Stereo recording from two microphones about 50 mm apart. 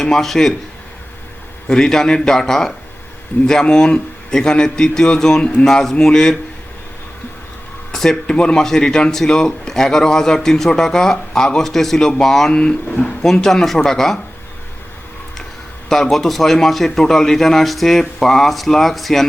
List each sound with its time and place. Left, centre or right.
0.0 s a man's voice: centre
1.6 s a man's voice: centre
7.9 s a man's voice: centre
8.3 s a man's voice: centre
15.9 s a man's voice: centre